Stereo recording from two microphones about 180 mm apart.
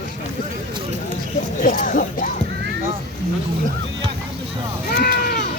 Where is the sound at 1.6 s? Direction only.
50° left (ahead or behind).